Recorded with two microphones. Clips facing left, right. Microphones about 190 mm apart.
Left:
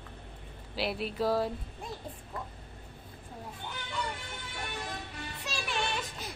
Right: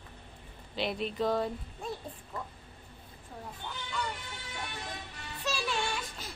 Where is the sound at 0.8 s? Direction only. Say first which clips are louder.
Even; 5° left (ahead or behind).